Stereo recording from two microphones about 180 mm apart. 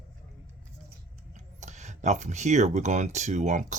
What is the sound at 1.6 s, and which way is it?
Speech, 40° right (ahead or behind).